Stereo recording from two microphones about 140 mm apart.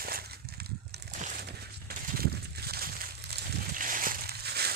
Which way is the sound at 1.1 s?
65° right (ahead or behind).